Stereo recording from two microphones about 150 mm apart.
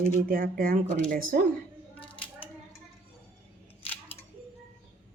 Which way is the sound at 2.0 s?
35° left (ahead or behind).